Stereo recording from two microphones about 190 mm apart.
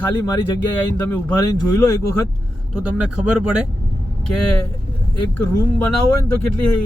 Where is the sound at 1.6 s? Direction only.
15° left (ahead or behind).